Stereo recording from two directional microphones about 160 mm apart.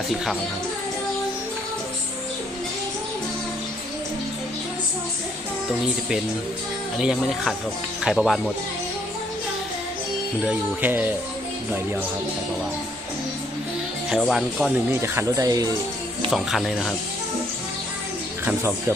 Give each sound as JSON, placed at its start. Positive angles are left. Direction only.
{"t": 7.0, "sound": "speech", "side_deg": -5}
{"t": 10.4, "sound": "speech", "side_deg": -10}
{"t": 14.1, "sound": "speech", "side_deg": 0}
{"t": 15.0, "sound": "speech", "side_deg": -15}
{"t": 16.3, "sound": "speech", "side_deg": 0}
{"t": 18.4, "sound": "speech", "side_deg": -15}